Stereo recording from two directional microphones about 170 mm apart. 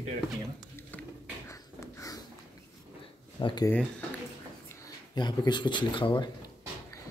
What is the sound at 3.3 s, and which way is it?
Speech, 25° left (ahead or behind).